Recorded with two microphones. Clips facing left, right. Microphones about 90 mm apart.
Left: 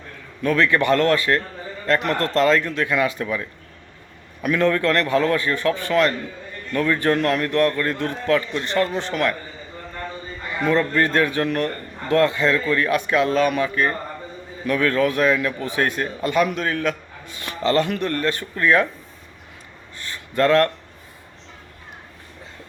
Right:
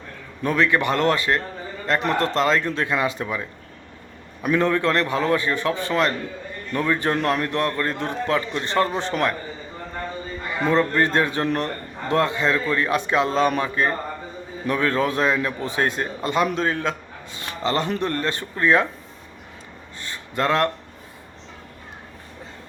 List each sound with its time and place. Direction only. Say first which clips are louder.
0.4 s a man's voice: left 2 dB; 15° right (ahead or behind)
4.4 s a man's voice: left 1 dB; 20° right (ahead or behind)
10.6 s a man's voice: even; 25° right (ahead or behind)
20.0 s a sound: left 4 dB; 20° right (ahead or behind)